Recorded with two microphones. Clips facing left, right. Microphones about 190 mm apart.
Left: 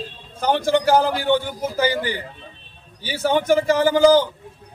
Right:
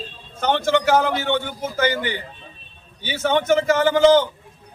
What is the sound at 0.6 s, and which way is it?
Speech, 35° left (ahead or behind).